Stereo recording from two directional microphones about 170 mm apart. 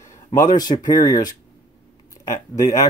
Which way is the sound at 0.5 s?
25° left (ahead or behind).